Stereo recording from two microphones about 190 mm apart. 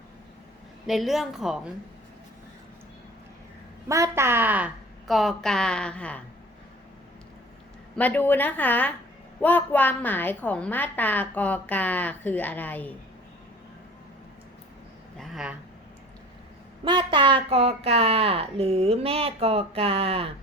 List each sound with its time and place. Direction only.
0.9 s a woman's voice: centre (ahead or behind)
3.8 s a woman's voice: 15° right (ahead or behind); by 6.2 s 5° left (ahead or behind)
7.9 s a woman's voice: 10° left (ahead or behind)
15.2 s a sound: centre (ahead or behind)
16.8 s a woman's voice: 25° right (ahead or behind)